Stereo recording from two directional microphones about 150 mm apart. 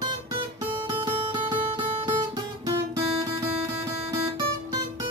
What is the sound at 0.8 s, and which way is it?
Music, 30° right (ahead or behind).